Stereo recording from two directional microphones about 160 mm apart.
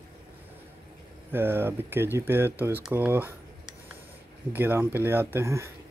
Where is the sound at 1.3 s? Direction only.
15° right (ahead or behind).